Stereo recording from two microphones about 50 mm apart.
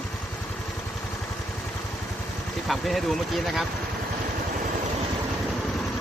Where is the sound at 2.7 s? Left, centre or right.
Centre.